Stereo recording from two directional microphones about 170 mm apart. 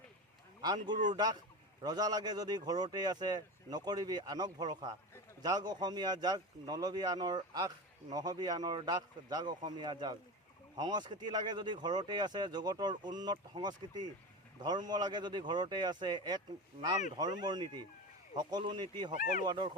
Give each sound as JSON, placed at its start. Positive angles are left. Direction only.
{"t": 1.0, "sound": "speech", "side_deg": -25}
{"t": 19.1, "sound": "speech", "side_deg": 55}
{"t": 19.5, "sound": "speech", "side_deg": -25}